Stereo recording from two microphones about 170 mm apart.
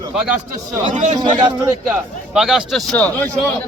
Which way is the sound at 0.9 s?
45° right (ahead or behind).